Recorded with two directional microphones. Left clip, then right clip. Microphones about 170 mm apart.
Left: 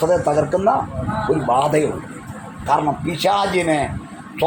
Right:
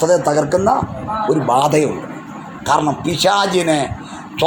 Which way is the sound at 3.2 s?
40° right (ahead or behind).